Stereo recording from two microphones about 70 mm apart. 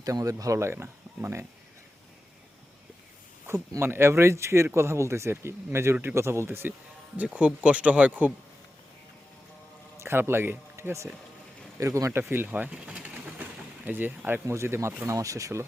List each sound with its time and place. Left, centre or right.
0.0 s speech: right
3.8 s speech: right
7.3 s speech: centre
10.0 s speech: right
12.1 s speech: right
12.7 s pigeon: centre
14.4 s speech: right